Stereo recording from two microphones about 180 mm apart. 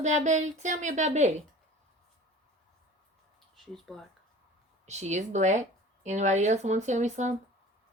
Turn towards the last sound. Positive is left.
turn(degrees=-40)  # may be behind; listen again after turning